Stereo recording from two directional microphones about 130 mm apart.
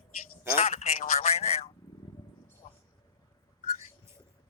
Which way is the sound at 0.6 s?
60° left (ahead or behind).